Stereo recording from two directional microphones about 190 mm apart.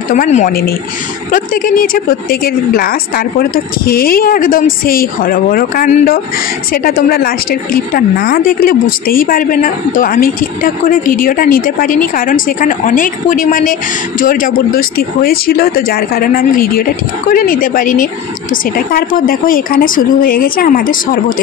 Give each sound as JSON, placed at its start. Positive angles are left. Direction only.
{"t": 0.1, "sound": "speech", "side_deg": 40}
{"t": 0.5, "sound": "speech", "side_deg": 55}